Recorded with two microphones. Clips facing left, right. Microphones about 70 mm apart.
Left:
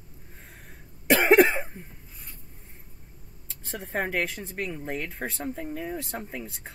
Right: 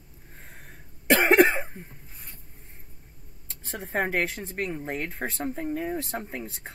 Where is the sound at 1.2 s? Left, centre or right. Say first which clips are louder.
Left 1 dB; centre.